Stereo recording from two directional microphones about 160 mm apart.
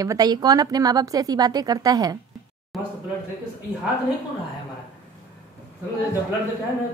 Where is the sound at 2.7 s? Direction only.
Centre (ahead or behind).